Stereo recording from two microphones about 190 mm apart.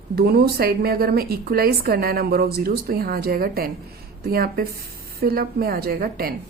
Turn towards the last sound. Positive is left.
turn(degrees=-50)  # may be behind; listen again after turning